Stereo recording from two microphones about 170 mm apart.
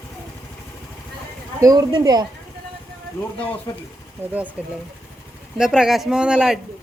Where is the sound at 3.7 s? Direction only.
20° left (ahead or behind).